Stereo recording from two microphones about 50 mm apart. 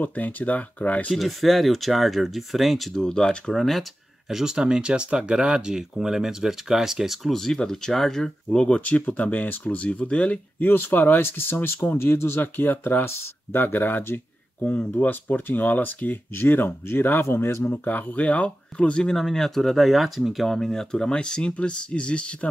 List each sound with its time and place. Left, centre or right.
0.0 s speech: left
1.1 s speech: centre
3.0 s speech: centre
4.3 s speech: centre
7.3 s speech: centre; by 10.4 s left
10.6 s speech: left
14.6 s speech: left
17.6 s speech: left
19.1 s speech: centre; by 22.5 s left